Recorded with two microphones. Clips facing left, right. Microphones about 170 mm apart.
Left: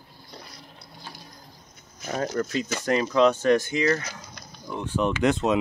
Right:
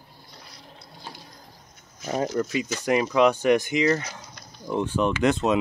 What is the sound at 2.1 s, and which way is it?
Speech, 15° right (ahead or behind).